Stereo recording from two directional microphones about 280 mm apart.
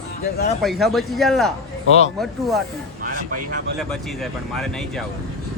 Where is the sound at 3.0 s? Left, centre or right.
Right.